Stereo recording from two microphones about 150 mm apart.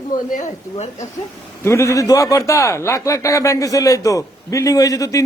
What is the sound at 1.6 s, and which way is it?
A man's voice, 20° left (ahead or behind).